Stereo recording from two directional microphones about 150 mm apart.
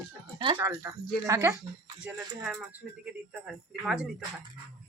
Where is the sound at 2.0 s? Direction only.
5° right (ahead or behind).